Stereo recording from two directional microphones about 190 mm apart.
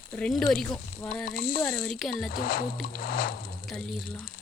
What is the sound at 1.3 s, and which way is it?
Speech, 50° left (ahead or behind).